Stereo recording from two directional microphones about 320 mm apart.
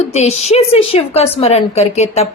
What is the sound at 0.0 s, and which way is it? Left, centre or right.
A woman's voice, centre.